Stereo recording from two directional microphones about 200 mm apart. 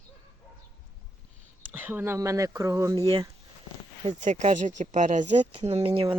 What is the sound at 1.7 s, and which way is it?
Speech, 10° right (ahead or behind).